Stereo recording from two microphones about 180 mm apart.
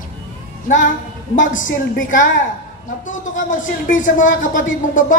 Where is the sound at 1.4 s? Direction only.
45° left (ahead or behind).